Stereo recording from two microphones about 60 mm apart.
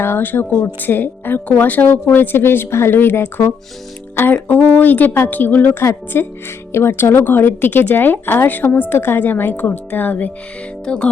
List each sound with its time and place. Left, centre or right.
0.0 s speech: left
5.8 s a woman's voice: left
10.8 s music: centre